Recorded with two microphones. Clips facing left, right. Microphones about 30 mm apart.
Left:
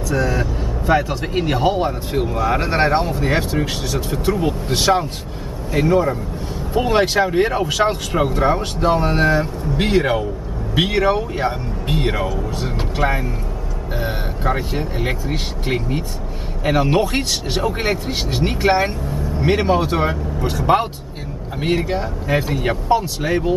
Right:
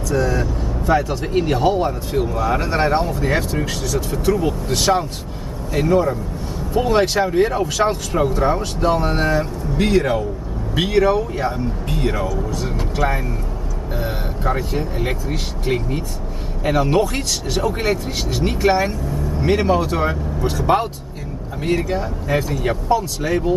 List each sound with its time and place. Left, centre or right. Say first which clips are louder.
0.1 s speech: right 1 dB; centre
9.8 s speech: even; left
11.1 s speech: even; left
19.4 s a man's voice: even; centre
19.7 s speech: left 1 dB; left
20.1 s speech: even; centre
21.5 s speech: left 1 dB; left